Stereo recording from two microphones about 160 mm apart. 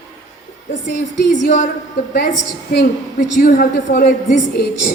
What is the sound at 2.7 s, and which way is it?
Speech, 75° left (ahead or behind).